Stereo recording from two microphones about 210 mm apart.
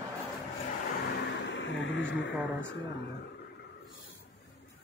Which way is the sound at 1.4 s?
60° left (ahead or behind).